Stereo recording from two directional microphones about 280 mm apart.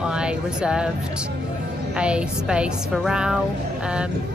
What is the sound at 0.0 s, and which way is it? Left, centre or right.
Speech, centre.